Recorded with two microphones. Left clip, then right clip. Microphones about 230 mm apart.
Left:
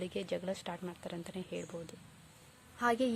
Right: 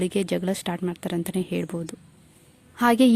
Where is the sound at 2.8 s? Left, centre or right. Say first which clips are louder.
Right 13 dB; right.